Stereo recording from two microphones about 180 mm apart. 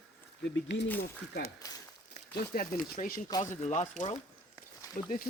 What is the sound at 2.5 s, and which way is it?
Speech, 50° left (ahead or behind).